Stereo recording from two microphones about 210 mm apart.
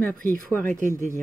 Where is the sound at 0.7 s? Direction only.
35° right (ahead or behind).